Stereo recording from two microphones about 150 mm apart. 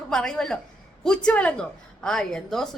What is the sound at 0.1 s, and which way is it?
A woman's voice, 5° left (ahead or behind).